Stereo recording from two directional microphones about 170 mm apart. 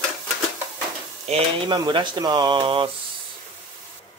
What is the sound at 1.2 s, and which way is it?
Speech, 35° right (ahead or behind).